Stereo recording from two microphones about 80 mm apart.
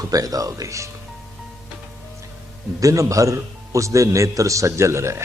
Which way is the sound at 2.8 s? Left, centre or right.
Right.